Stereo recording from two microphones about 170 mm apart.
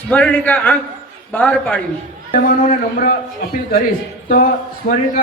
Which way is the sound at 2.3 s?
50° left (ahead or behind).